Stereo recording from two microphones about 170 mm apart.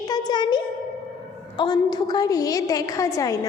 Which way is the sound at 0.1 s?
25° left (ahead or behind).